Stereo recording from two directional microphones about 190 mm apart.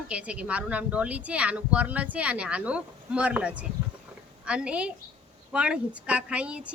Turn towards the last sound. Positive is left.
turn(degrees=-5)  # may be behind; listen again after turning